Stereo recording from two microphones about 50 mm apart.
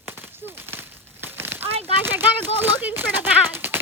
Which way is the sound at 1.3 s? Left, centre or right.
Right.